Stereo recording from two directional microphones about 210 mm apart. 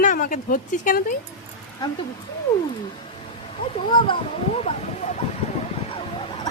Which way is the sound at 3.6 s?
25° left (ahead or behind).